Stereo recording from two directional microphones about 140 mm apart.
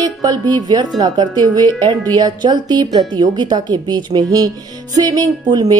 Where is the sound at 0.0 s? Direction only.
30° right (ahead or behind).